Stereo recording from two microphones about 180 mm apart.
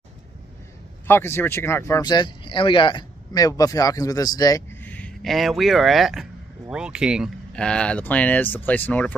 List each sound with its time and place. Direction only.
1.0 s speech: 10° left (ahead or behind)
4.8 s speech: 5° left (ahead or behind)